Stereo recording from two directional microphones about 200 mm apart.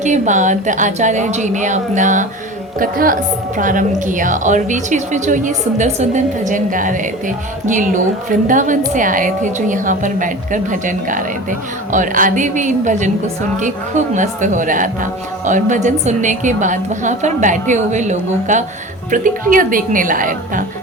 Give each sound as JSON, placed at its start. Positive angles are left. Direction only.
{"t": 0.0, "sound": "a woman's voice", "side_deg": -35}